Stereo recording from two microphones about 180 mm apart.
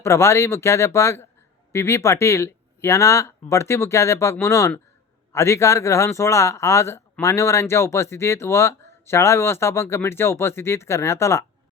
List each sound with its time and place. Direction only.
0.0 s a man's voice: 15° left (ahead or behind)